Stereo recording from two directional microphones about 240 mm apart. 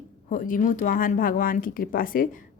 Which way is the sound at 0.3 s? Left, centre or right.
Left.